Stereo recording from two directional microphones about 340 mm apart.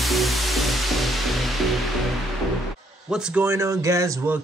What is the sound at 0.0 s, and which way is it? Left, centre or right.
Music, centre.